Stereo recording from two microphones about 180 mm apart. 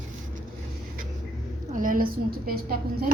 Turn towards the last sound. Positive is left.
turn(degrees=-55)  # may be behind; listen again after turning